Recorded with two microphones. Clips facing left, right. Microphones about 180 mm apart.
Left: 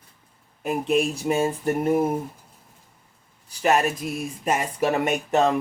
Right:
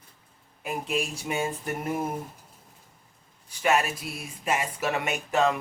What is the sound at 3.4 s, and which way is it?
Speech, 40° left (ahead or behind).